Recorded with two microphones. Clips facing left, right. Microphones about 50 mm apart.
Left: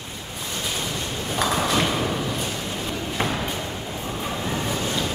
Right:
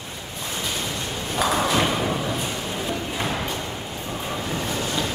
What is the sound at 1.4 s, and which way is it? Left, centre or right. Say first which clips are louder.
Thump: right 1 dB; centre.